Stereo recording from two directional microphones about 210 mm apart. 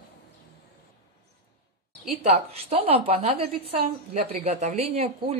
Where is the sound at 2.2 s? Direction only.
30° right (ahead or behind).